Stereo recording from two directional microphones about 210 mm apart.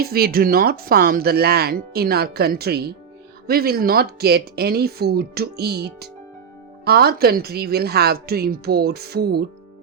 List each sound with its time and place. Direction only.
0.0 s speech: 45° right (ahead or behind)